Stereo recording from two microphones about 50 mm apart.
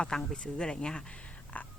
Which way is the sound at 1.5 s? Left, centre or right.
Left.